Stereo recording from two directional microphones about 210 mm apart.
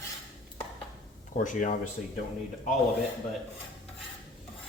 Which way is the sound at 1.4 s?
40° left (ahead or behind).